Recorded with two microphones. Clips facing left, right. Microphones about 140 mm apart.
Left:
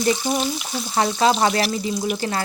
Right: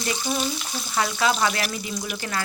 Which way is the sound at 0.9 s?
35° left (ahead or behind).